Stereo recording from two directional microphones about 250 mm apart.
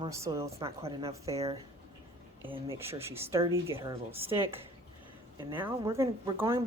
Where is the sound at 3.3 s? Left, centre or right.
Centre.